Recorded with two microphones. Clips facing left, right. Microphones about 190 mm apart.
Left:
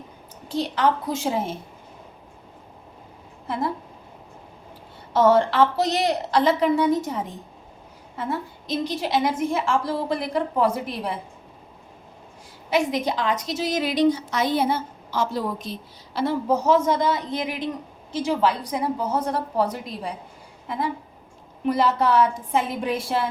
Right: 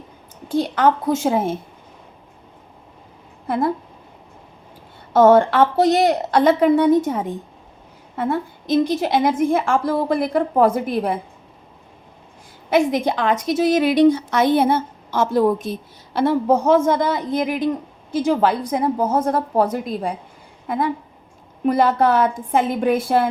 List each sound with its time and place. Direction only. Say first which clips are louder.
0.4 s a woman's voice: right 5 dB; 50° right (ahead or behind)
3.4 s speech: right 6 dB; 55° right (ahead or behind)
5.1 s a woman's voice: right 5 dB; 55° right (ahead or behind)
12.7 s a woman's voice: right 5 dB; 55° right (ahead or behind)
21.7 s a woman's voice: right 4 dB; 55° right (ahead or behind)